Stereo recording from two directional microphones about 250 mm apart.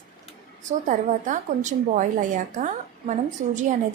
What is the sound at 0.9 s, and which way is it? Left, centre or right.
A woman's voice, right.